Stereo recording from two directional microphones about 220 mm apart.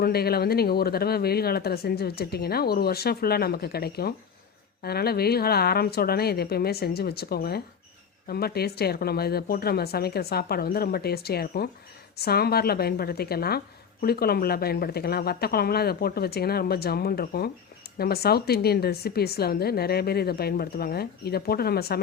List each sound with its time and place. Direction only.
0.0 s speech: 45° left (ahead or behind)